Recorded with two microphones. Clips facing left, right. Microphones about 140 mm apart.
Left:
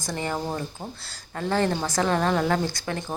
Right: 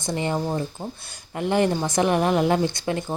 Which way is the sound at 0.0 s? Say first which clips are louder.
Right 4 dB; 20° right (ahead or behind).